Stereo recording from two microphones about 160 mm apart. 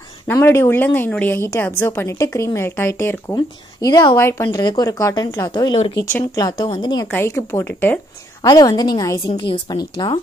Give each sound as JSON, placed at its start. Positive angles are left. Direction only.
{"t": 0.3, "sound": "a woman's voice", "side_deg": 15}
{"t": 7.1, "sound": "a woman's voice", "side_deg": 15}
{"t": 8.4, "sound": "speech", "side_deg": 25}
{"t": 9.3, "sound": "speech", "side_deg": 35}